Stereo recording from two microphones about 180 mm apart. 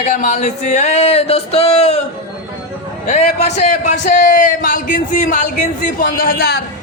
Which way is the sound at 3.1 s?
35° left (ahead or behind).